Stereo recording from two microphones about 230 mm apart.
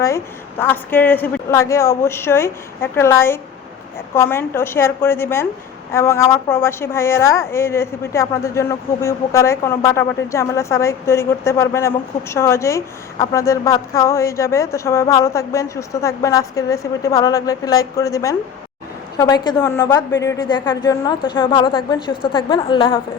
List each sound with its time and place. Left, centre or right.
0.6 s a woman's voice: centre